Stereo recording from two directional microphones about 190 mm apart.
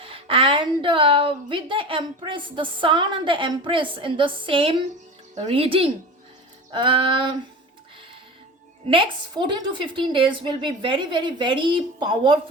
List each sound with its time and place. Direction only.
0.0 s a woman's voice: 30° right (ahead or behind)
8.9 s a woman's voice: 25° right (ahead or behind)